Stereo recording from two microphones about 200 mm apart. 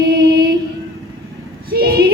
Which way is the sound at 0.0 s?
55° right (ahead or behind).